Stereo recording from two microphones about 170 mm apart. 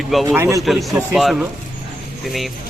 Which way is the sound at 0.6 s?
Centre (ahead or behind).